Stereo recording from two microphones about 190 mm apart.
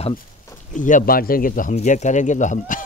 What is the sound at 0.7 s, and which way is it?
Speech, 45° left (ahead or behind).